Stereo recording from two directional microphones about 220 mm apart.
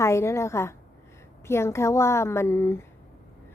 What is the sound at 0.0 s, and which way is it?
Speech, 10° left (ahead or behind).